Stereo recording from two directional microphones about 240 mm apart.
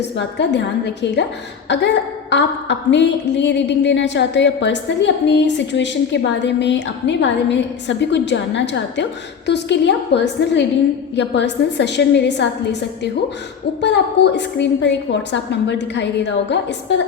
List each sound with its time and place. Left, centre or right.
0.2 s a woman's voice: left
13.8 s a woman's voice: left